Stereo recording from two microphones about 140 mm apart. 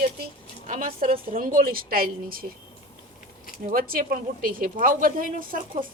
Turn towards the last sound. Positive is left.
turn(degrees=-80)